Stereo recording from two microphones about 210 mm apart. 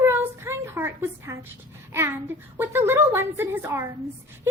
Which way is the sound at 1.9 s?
10° right (ahead or behind).